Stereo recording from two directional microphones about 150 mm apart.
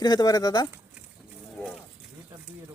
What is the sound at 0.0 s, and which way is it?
Speech, 25° left (ahead or behind).